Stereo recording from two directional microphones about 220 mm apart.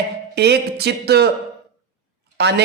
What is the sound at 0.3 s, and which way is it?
Speech, 50° right (ahead or behind).